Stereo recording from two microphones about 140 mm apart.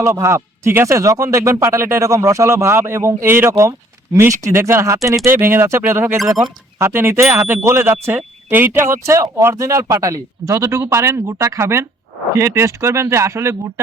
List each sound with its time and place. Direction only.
0.0 s speech: 20° right (ahead or behind)